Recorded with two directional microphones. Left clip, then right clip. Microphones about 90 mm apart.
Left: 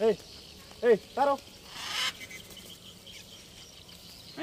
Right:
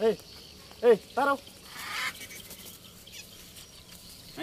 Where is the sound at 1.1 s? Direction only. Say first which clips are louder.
Even; 35° right (ahead or behind).